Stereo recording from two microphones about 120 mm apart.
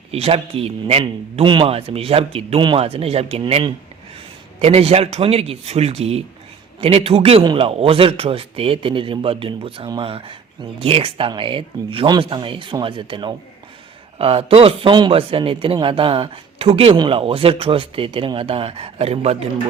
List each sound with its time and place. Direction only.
0.1 s a man's voice: 55° right (ahead or behind)
14.2 s a man's voice: 55° right (ahead or behind)